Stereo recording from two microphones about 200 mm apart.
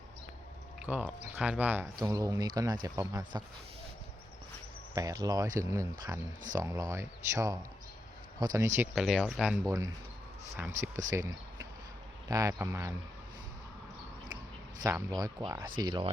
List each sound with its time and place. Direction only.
0.9 s speech: 5° right (ahead or behind)
4.9 s speech: 15° right (ahead or behind)
9.0 s speech: centre (ahead or behind)
14.8 s speech: 15° right (ahead or behind)